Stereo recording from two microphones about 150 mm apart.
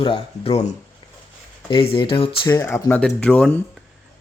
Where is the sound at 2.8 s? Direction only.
10° left (ahead or behind).